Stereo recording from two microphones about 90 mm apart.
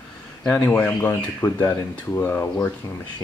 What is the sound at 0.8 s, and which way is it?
Speech, 25° left (ahead or behind).